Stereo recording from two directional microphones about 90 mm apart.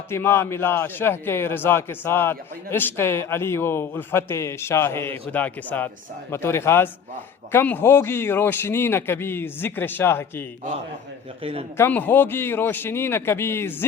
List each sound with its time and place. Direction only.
0.1 s a man's voice: 25° left (ahead or behind)
5.3 s speech: 15° left (ahead or behind)
6.3 s a man's voice: 30° left (ahead or behind)
11.8 s a man's voice: 20° left (ahead or behind)